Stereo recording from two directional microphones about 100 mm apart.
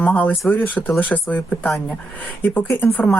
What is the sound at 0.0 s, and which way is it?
Speech, 15° left (ahead or behind).